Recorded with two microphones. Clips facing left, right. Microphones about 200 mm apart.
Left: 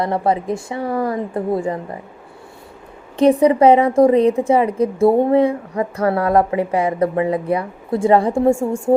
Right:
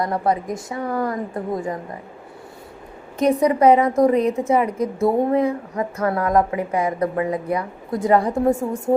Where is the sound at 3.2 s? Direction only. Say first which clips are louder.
Left 5 dB; 30° left (ahead or behind).